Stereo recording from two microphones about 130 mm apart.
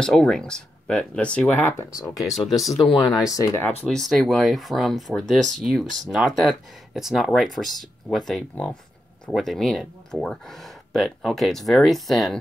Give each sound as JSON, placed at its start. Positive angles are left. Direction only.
{"t": 0.0, "sound": "speech", "side_deg": 5}
{"t": 2.3, "sound": "speech", "side_deg": 0}
{"t": 3.2, "sound": "speech", "side_deg": 25}
{"t": 3.8, "sound": "speech", "side_deg": 0}